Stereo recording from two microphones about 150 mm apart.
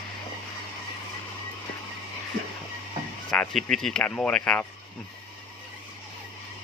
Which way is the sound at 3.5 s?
5° left (ahead or behind).